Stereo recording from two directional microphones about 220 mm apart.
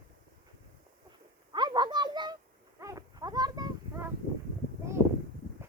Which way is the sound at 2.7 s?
15° right (ahead or behind).